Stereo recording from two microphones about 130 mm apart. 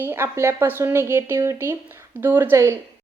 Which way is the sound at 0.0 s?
20° right (ahead or behind).